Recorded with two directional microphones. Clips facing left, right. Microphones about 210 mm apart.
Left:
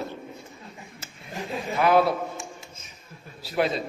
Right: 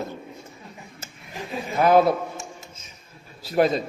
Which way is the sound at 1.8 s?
40° right (ahead or behind).